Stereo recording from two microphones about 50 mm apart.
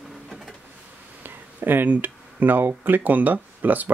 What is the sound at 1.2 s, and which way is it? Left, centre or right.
Speech, right.